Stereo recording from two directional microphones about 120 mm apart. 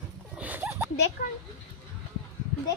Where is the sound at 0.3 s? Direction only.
15° right (ahead or behind).